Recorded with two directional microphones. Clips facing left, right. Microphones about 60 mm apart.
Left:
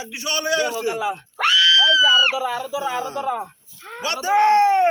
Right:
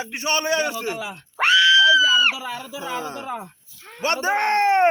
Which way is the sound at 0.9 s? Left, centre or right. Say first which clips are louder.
Left 7 dB; centre.